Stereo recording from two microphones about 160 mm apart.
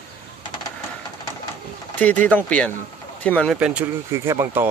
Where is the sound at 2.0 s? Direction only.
10° left (ahead or behind).